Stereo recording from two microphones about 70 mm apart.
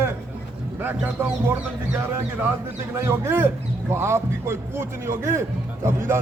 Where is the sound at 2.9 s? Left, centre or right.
Right.